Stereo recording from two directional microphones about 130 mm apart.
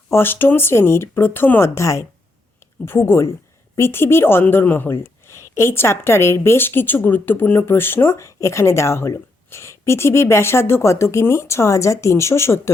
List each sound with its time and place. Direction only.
0.1 s a woman's voice: 15° left (ahead or behind)